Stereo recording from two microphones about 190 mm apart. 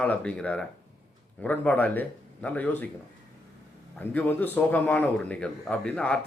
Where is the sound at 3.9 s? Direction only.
10° left (ahead or behind).